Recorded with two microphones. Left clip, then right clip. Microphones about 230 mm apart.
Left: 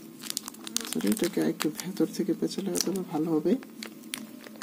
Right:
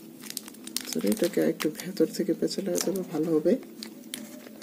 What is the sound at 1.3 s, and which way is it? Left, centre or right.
Speech, left.